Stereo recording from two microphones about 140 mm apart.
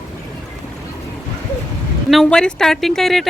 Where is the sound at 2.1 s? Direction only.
5° left (ahead or behind).